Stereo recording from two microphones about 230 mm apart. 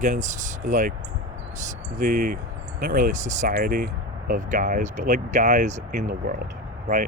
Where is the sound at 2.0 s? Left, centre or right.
Right.